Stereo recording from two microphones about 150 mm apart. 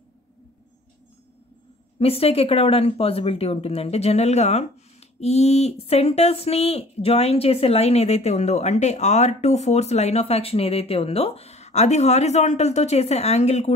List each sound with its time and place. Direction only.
2.0 s speech: 40° left (ahead or behind)